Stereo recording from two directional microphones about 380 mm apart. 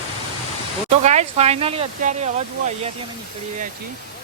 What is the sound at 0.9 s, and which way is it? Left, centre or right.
Speech, centre.